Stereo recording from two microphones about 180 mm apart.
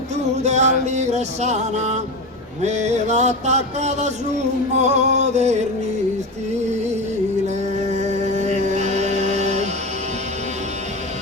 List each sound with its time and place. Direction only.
0.4 s music: 40° right (ahead or behind)
0.9 s a man's voice: 40° right (ahead or behind)
7.4 s music: 40° right (ahead or behind)